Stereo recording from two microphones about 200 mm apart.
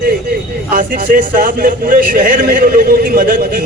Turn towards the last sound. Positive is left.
turn(degrees=-45)  # may be behind; listen again after turning